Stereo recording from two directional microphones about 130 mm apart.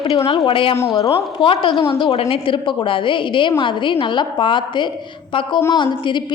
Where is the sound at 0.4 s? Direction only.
40° left (ahead or behind).